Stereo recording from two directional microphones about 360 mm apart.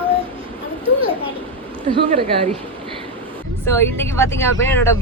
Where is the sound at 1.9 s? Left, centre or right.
Centre.